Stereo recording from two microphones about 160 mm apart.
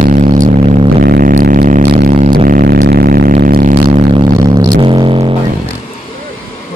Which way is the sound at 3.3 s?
60° right (ahead or behind).